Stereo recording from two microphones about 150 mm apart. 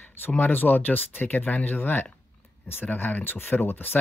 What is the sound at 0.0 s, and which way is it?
Speech, 10° left (ahead or behind).